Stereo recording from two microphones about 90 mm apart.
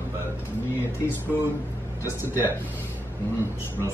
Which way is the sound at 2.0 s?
25° right (ahead or behind).